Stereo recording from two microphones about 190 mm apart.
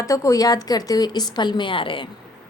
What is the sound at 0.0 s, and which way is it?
A woman's voice, 15° left (ahead or behind).